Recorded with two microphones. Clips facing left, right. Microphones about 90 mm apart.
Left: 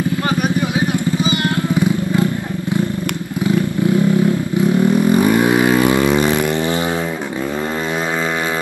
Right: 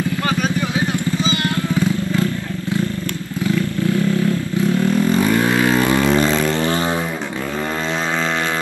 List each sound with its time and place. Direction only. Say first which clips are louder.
0.4 s vehicle: left 2 dB; 15° left (ahead or behind)
3.4 s vehicle: left 3 dB; 20° left (ahead or behind)